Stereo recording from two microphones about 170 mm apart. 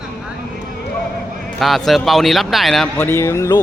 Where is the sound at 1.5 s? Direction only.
Centre (ahead or behind).